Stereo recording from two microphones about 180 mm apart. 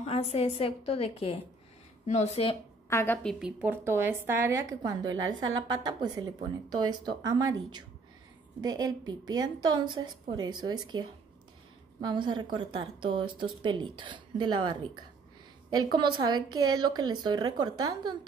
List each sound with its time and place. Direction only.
0.0 s a woman's voice: 35° left (ahead or behind)
2.9 s a woman's voice: 15° left (ahead or behind)
3.3 s a woman's voice: 5° right (ahead or behind)
5.0 s a woman's voice: 90° right
5.6 s a woman's voice: 20° right (ahead or behind)